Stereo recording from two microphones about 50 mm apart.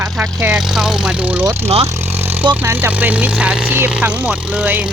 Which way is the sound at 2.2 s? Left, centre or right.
Right.